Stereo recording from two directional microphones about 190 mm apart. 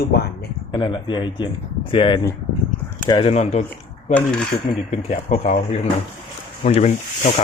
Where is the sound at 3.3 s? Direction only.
35° left (ahead or behind).